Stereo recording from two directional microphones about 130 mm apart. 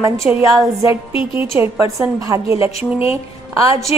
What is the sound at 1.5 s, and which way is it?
A woman's voice, 20° right (ahead or behind).